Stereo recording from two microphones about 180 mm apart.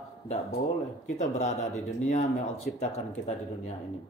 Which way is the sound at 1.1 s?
40° left (ahead or behind).